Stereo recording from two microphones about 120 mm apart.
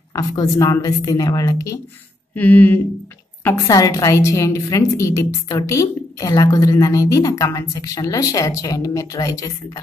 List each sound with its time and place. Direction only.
0.1 s a woman's voice: 25° left (ahead or behind)
2.3 s speech: 15° left (ahead or behind)
3.6 s a woman's voice: 30° left (ahead or behind)